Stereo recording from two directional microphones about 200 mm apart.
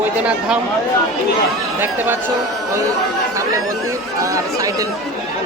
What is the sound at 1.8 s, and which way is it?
Speech, 10° right (ahead or behind).